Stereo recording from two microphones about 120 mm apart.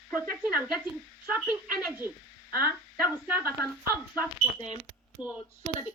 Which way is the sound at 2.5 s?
15° right (ahead or behind).